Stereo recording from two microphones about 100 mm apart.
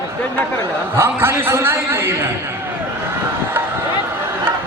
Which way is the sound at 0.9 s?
25° right (ahead or behind).